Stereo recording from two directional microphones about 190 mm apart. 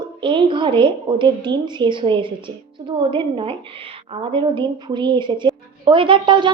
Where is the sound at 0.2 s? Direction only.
25° right (ahead or behind).